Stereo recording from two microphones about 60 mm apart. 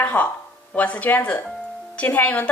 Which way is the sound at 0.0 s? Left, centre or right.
Left.